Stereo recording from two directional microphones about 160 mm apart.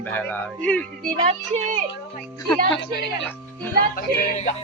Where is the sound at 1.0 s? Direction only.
50° right (ahead or behind).